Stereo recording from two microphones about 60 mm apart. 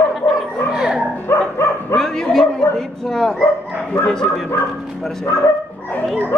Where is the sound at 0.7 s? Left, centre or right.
Centre.